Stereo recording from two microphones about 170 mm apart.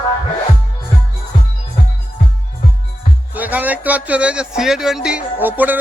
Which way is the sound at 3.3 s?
10° right (ahead or behind).